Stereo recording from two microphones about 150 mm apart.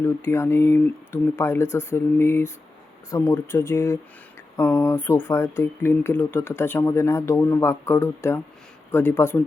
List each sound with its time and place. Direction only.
0.0 s speech: 15° left (ahead or behind)